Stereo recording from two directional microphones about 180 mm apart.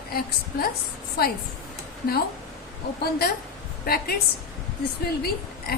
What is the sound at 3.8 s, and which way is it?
Speech, 55° left (ahead or behind).